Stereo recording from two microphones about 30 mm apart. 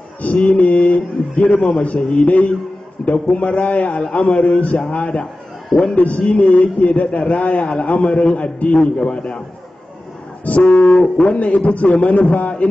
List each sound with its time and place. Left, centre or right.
0.2 s a man's voice: left
5.9 s a man's voice: left
6.8 s a man's voice: left
8.7 s a man's voice: left
10.4 s a man's voice: left
10.7 s a man's voice: left
11.3 s a man's voice: left